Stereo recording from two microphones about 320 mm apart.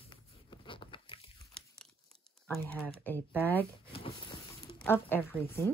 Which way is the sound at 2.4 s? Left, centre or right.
Centre.